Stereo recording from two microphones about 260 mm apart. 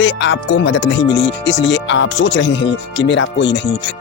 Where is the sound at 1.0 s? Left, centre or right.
Left.